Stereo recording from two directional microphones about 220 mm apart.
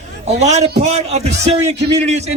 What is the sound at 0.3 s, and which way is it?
Speech, 30° right (ahead or behind).